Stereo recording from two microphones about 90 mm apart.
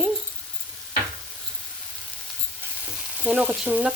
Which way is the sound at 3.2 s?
15° right (ahead or behind).